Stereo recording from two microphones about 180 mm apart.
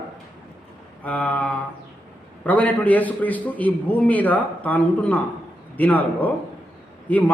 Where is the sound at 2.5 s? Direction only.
10° left (ahead or behind).